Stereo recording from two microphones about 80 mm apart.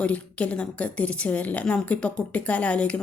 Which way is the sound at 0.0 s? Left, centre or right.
Centre.